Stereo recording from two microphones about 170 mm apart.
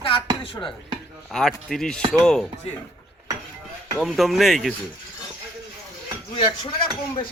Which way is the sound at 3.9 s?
Centre (ahead or behind).